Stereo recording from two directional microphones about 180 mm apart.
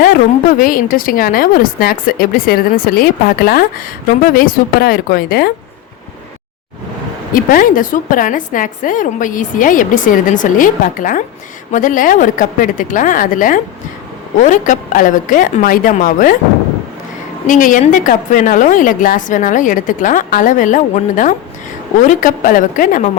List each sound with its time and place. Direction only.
0.6 s a woman's voice: 50° left (ahead or behind)
7.3 s a woman's voice: 50° left (ahead or behind)
17.4 s a woman's voice: 45° left (ahead or behind)